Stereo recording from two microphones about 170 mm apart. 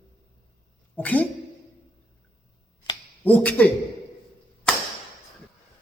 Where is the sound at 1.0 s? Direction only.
10° left (ahead or behind).